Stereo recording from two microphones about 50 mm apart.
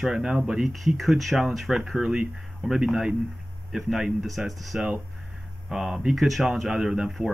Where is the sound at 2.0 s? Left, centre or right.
Centre.